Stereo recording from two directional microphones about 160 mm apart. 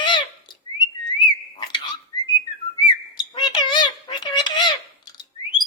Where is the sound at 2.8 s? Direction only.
25° left (ahead or behind).